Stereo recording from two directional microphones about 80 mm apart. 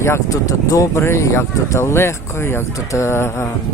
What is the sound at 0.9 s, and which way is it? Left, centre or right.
Speech, left.